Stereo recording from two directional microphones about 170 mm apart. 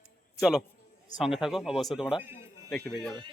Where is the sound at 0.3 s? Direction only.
5° right (ahead or behind).